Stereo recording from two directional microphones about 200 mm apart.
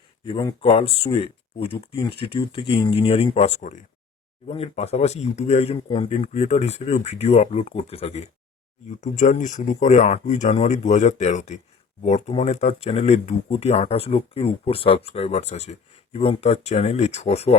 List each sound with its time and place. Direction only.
0.3 s speech: 25° left (ahead or behind)